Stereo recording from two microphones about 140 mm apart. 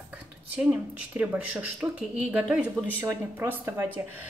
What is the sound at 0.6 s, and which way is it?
Speech, 10° right (ahead or behind).